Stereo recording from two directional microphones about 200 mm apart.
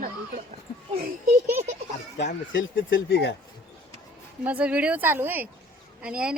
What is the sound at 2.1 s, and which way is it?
Speech, 65° left (ahead or behind).